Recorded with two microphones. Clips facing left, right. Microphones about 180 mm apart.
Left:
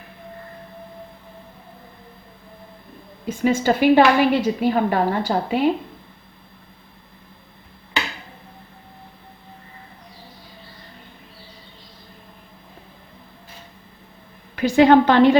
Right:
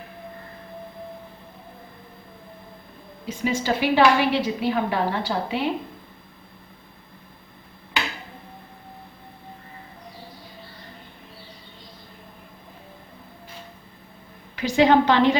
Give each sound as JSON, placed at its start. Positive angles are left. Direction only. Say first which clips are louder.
{"t": 3.2, "sound": "a woman's voice", "louder": "left 5 dB", "side_deg": 50}
{"t": 14.5, "sound": "a woman's voice", "louder": "left 4 dB", "side_deg": 50}